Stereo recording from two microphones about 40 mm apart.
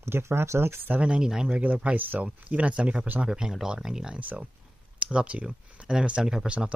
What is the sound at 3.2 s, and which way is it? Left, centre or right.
Speech, centre.